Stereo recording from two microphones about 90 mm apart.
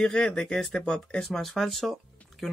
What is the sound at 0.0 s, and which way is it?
Speech, 10° left (ahead or behind).